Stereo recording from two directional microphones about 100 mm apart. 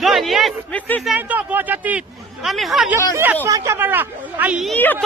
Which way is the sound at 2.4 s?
Centre (ahead or behind).